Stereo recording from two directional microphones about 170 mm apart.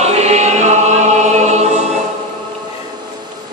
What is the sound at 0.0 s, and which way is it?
Choir, 40° right (ahead or behind).